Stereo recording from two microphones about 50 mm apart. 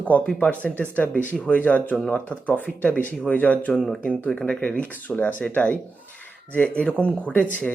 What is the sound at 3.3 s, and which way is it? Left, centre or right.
Speech, left.